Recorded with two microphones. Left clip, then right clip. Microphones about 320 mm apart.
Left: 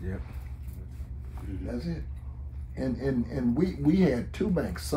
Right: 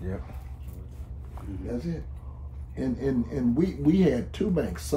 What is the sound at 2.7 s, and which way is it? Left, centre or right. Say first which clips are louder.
Speech: right 2 dB; centre.